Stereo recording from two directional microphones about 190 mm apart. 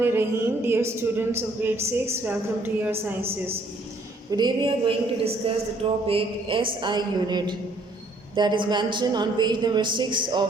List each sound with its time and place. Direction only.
0.0 s a man's voice: 10° right (ahead or behind)
4.3 s a woman's voice: 20° right (ahead or behind)